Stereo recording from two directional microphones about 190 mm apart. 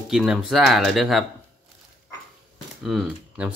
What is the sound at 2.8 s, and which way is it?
Speech, 5° right (ahead or behind).